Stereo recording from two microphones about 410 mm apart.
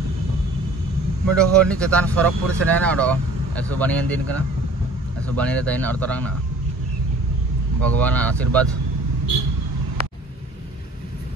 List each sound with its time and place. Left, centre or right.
1.3 s speech: centre
7.8 s speech: centre